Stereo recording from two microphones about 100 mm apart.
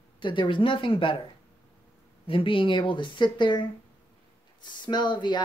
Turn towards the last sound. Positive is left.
turn(degrees=50)  # may be behind; listen again after turning